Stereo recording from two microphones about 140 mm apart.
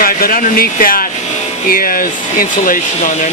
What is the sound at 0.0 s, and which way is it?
Speech, 90° left.